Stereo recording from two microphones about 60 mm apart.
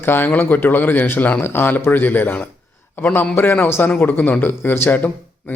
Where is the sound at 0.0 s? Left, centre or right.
Left.